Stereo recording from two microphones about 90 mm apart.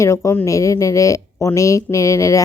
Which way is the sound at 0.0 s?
35° left (ahead or behind).